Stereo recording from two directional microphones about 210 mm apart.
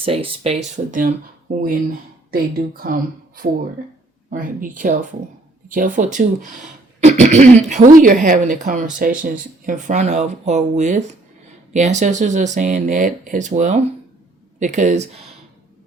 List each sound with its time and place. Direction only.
0.0 s a woman's voice: 25° right (ahead or behind)